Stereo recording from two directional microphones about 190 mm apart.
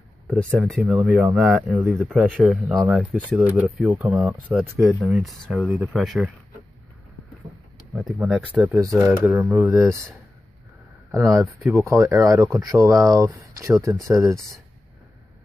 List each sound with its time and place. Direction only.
0.6 s speech: 5° right (ahead or behind)
7.9 s speech: centre (ahead or behind)
8.6 s speech: 15° right (ahead or behind)
11.1 s speech: 15° right (ahead or behind)